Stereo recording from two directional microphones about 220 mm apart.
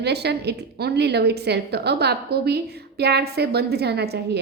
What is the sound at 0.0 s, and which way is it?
A woman's voice, 50° right (ahead or behind).